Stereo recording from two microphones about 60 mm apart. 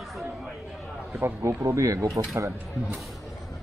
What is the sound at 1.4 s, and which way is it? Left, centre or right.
Speech, right.